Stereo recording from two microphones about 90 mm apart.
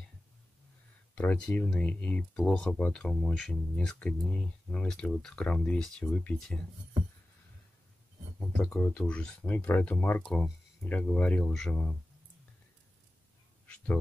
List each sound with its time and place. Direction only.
1.1 s speech: 15° left (ahead or behind)
8.4 s speech: 10° left (ahead or behind)
10.3 s speech: 5° left (ahead or behind)